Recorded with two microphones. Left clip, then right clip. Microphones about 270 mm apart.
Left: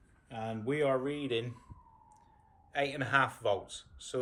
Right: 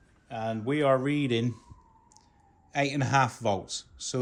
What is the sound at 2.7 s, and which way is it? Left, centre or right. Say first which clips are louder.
A man's voice: right 4 dB; right.